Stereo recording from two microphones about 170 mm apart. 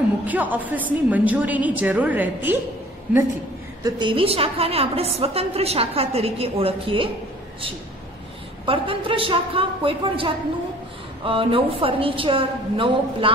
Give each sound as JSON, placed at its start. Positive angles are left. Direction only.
{"t": 0.3, "sound": "a woman's voice", "side_deg": -10}
{"t": 3.8, "sound": "a woman's voice", "side_deg": -30}
{"t": 8.6, "sound": "a woman's voice", "side_deg": -30}